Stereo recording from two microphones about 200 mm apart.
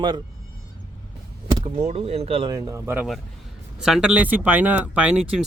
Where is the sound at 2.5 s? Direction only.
15° right (ahead or behind).